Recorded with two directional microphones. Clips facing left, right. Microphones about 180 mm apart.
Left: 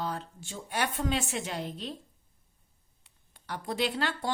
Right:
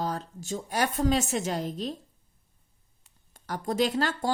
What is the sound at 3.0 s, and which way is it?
Speech, 45° right (ahead or behind).